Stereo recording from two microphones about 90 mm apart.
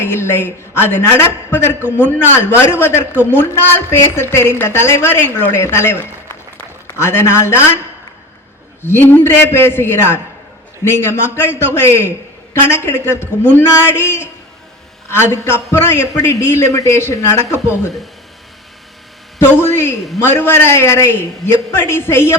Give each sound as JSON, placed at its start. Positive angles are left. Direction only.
{"t": 0.0, "sound": "a man's voice", "side_deg": 30}
{"t": 8.8, "sound": "a man's voice", "side_deg": 25}
{"t": 19.4, "sound": "a man's voice", "side_deg": 25}